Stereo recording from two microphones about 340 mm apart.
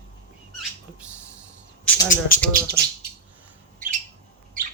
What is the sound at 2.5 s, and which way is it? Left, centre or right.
Speech, right.